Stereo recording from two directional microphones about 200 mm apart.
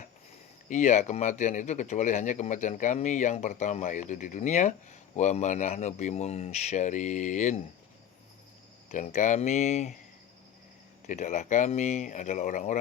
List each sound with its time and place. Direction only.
0.7 s speech: 35° left (ahead or behind)
8.9 s speech: 40° left (ahead or behind)
11.0 s speech: 40° left (ahead or behind)